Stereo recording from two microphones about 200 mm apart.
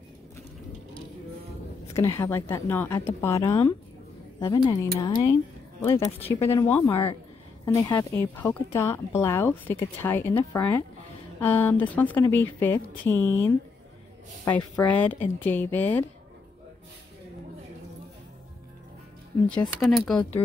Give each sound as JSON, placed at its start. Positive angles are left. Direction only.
{"t": 2.0, "sound": "speech", "side_deg": 15}
{"t": 19.4, "sound": "speech", "side_deg": 5}
{"t": 20.4, "sound": "speech", "side_deg": 30}